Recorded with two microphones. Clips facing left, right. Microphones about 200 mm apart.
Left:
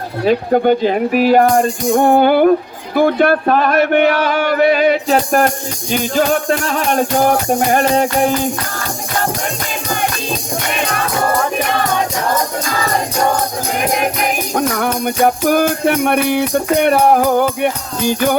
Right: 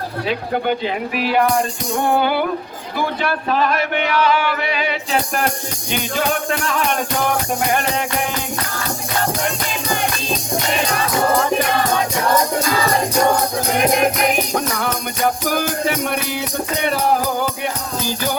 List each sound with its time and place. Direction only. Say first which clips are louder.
0.3 s speech: left 9 dB; 45° left (ahead or behind)
5.9 s music: left 6 dB; 40° left (ahead or behind)
14.8 s music: left 6 dB; 50° left (ahead or behind)